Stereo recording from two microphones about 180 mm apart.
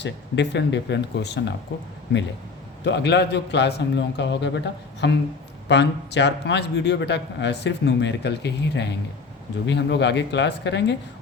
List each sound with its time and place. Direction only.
0.0 s a man's voice: 75° left (ahead or behind)
2.8 s a man's voice: 70° left (ahead or behind)